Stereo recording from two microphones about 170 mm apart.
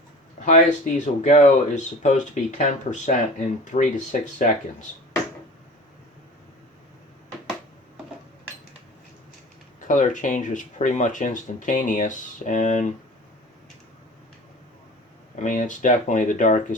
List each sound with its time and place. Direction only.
0.4 s speech: 45° left (ahead or behind)
9.8 s speech: 50° left (ahead or behind)
15.4 s speech: 50° left (ahead or behind)